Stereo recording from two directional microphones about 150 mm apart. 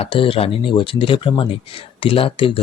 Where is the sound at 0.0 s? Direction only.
35° left (ahead or behind).